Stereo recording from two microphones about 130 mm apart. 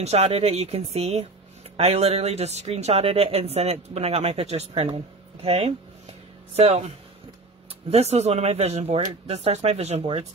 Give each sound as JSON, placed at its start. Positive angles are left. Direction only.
{"t": 0.0, "sound": "speech", "side_deg": -55}
{"t": 7.9, "sound": "speech", "side_deg": -55}